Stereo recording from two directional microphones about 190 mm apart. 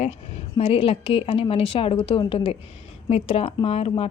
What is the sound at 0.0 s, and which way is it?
A woman's voice, 30° left (ahead or behind).